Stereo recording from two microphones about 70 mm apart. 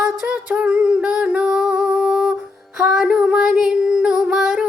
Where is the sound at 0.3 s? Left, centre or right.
Centre.